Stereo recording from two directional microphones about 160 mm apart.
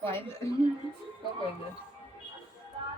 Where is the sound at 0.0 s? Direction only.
15° left (ahead or behind).